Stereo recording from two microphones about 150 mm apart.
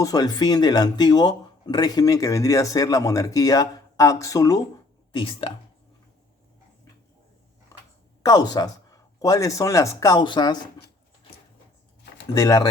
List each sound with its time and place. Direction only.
0.0 s speech: 25° left (ahead or behind)
5.1 s speech: 35° left (ahead or behind)
8.2 s speech: 25° left (ahead or behind)
12.3 s speech: 25° left (ahead or behind)